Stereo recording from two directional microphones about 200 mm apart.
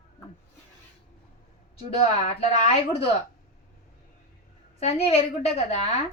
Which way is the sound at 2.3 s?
30° left (ahead or behind).